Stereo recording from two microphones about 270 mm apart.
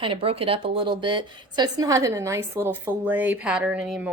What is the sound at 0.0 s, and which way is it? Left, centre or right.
A woman's voice, centre.